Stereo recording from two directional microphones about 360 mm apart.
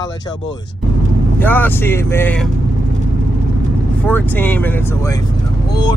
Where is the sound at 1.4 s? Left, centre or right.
Centre.